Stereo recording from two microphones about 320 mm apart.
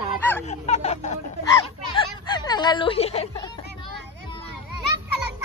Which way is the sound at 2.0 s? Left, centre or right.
Centre.